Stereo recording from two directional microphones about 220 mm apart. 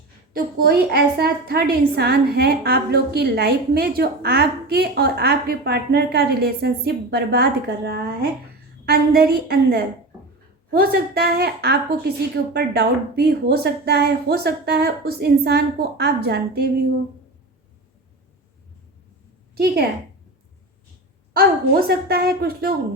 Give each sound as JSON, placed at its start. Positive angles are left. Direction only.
{"t": 0.3, "sound": "a woman's voice", "side_deg": -45}
{"t": 19.5, "sound": "a woman's voice", "side_deg": -45}
{"t": 21.3, "sound": "a woman's voice", "side_deg": -45}